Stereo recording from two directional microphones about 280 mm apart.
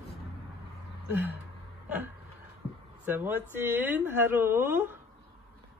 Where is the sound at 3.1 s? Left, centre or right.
Centre.